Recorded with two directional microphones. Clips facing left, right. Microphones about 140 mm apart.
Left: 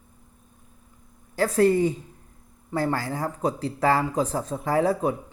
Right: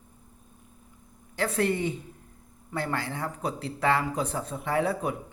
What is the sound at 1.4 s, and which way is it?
Speech, 35° left (ahead or behind).